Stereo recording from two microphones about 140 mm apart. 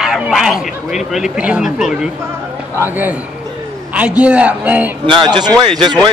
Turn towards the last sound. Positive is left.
turn(degrees=-35)  # may be behind; listen again after turning